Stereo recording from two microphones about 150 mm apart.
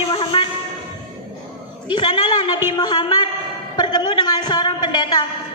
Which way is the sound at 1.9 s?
30° left (ahead or behind).